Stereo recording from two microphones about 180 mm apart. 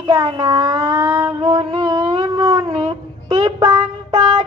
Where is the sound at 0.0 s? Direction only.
20° right (ahead or behind).